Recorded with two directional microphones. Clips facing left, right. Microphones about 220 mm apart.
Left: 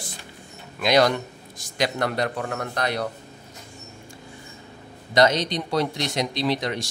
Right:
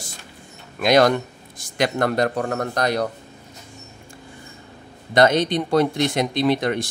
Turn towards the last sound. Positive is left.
turn(degrees=-55)  # may be behind; listen again after turning